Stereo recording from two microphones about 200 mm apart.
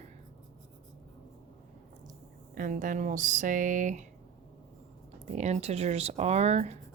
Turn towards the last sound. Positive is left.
turn(degrees=-35)  # may be behind; listen again after turning